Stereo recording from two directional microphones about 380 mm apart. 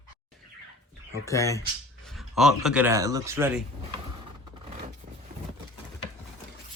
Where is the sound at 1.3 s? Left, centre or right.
Centre.